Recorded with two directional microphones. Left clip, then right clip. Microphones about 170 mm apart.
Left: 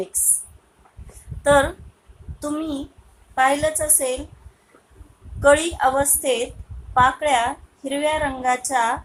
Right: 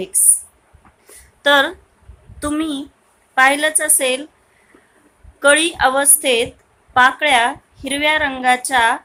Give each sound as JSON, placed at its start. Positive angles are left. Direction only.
{"t": 1.5, "sound": "a woman's voice", "side_deg": -40}
{"t": 5.4, "sound": "a woman's voice", "side_deg": -40}